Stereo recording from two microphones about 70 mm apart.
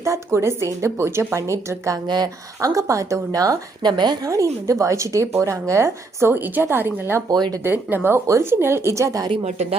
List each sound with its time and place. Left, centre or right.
0.3 s a woman's voice: right
2.0 s speech: right
2.6 s speech: right
3.8 s speech: right
4.3 s speech: right
7.3 s speech: right
7.6 s speech: right
8.3 s speech: right